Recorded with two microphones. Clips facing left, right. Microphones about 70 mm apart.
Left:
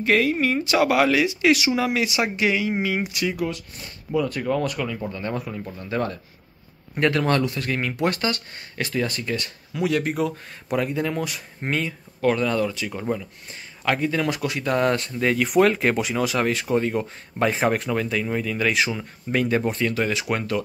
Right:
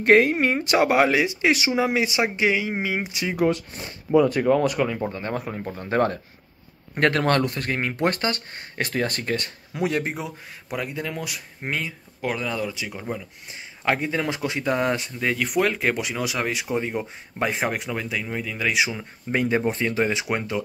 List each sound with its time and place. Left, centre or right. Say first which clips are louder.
0.0 s speech: right 3 dB; right; by 4.8 s centre
4.8 s speech: right 1 dB; right
10.7 s speech: left 5 dB; centre
13.8 s speech: left 1 dB; right
19.3 s speech: even; centre